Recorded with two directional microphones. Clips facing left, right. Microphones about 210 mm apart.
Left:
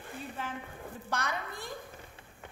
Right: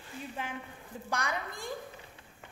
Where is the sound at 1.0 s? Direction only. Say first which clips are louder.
Right 1 dB; 15° right (ahead or behind).